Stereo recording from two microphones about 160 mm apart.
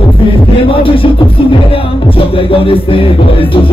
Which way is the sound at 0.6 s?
35° left (ahead or behind).